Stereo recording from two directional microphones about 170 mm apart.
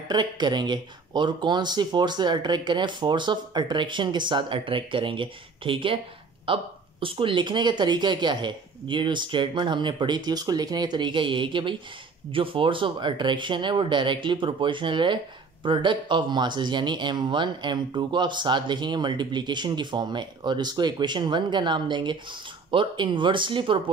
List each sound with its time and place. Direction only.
0.1 s speech: 25° right (ahead or behind)